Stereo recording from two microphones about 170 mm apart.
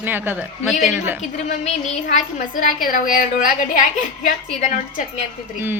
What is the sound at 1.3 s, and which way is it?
A woman's voice, 40° left (ahead or behind).